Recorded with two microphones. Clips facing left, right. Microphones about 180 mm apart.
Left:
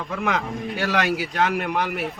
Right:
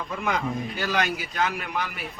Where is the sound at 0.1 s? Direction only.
75° left (ahead or behind).